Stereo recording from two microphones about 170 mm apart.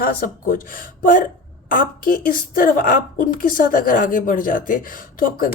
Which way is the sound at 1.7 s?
55° left (ahead or behind).